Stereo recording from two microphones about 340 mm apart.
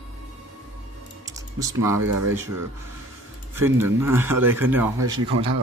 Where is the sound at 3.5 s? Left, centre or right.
Centre.